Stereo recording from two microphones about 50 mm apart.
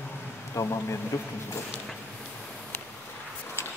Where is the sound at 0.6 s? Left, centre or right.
Left.